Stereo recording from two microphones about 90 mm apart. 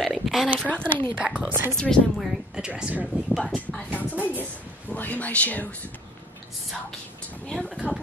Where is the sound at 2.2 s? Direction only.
10° right (ahead or behind).